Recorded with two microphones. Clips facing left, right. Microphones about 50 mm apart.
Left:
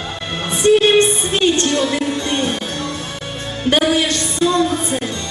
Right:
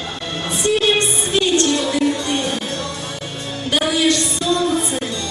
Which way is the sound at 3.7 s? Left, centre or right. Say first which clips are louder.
Left 1 dB; left.